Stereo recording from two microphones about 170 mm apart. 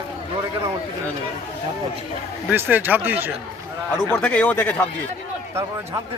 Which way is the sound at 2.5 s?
10° right (ahead or behind).